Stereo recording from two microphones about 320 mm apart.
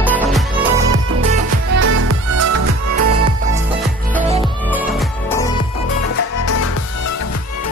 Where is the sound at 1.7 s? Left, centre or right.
Right.